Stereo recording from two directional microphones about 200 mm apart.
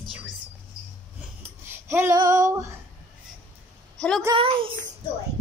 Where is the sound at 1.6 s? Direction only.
10° right (ahead or behind).